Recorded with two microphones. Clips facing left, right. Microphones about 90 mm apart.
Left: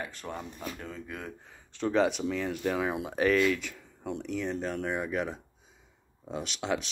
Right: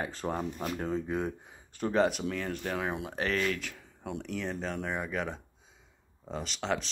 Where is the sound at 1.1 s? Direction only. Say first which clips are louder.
Right 8 dB; 20° right (ahead or behind).